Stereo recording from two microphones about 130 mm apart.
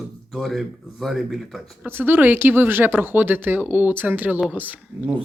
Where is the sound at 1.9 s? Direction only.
15° right (ahead or behind).